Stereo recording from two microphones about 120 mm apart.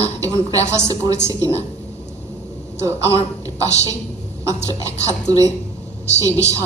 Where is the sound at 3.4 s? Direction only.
30° right (ahead or behind).